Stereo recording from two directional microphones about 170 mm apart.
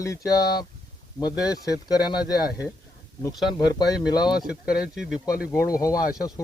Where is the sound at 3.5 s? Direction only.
25° left (ahead or behind).